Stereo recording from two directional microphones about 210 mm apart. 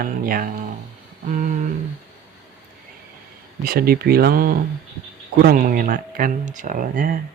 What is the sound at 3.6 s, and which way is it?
Speech, 45° right (ahead or behind).